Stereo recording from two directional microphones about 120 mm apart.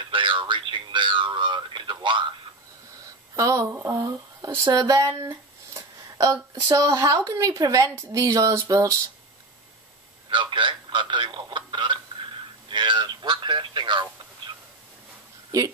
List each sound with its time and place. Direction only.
0.1 s a sound: 45° right (ahead or behind)
3.3 s speech: 25° right (ahead or behind)
10.3 s speech: 40° right (ahead or behind)
15.5 s speech: 30° right (ahead or behind)